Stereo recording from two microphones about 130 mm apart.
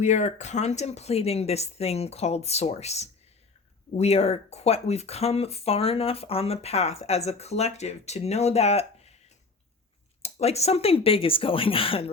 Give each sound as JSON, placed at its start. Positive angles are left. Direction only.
{"t": 0.0, "sound": "speech", "side_deg": 65}
{"t": 10.2, "sound": "speech", "side_deg": 55}